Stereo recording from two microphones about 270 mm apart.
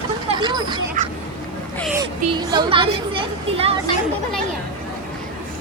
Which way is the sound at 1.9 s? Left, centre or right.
Centre.